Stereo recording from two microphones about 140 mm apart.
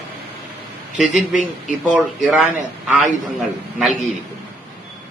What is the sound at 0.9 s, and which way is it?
Speech, 60° left (ahead or behind).